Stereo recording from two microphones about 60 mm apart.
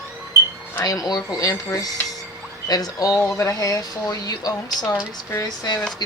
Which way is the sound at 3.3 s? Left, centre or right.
Left.